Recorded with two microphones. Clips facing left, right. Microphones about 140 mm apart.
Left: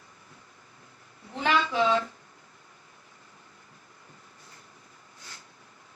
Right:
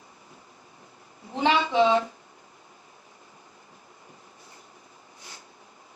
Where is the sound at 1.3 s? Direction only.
25° right (ahead or behind).